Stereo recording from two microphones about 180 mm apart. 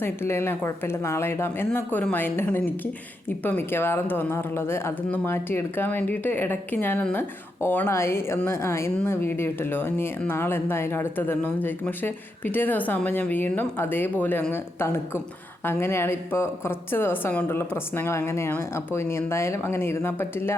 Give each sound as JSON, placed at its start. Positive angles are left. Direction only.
{"t": 0.0, "sound": "a woman's voice", "side_deg": 15}